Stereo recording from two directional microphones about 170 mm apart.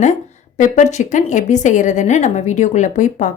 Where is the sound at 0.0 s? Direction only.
45° left (ahead or behind).